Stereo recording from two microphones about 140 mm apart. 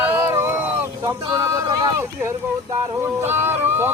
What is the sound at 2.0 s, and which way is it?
Speech, 15° right (ahead or behind).